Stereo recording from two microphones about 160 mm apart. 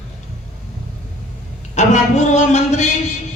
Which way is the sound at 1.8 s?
45° left (ahead or behind).